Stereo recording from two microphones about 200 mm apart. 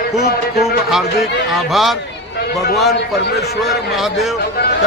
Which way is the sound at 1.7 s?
Centre (ahead or behind).